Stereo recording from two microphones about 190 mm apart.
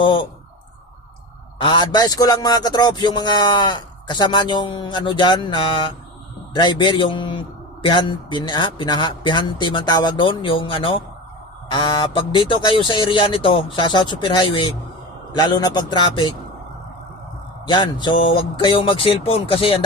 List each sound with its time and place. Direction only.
0.0 s a man's voice: 25° left (ahead or behind)
1.5 s a man's voice: 25° left (ahead or behind)
17.7 s a man's voice: 25° left (ahead or behind)